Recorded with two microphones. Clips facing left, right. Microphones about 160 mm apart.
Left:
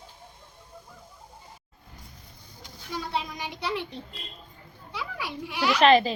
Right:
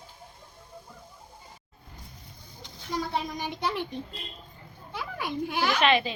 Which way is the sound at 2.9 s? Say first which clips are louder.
Right 2 dB; 45° right (ahead or behind).